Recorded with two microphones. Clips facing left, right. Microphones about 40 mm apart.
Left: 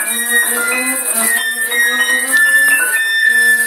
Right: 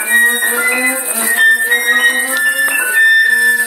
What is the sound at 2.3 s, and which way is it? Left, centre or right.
Music, right.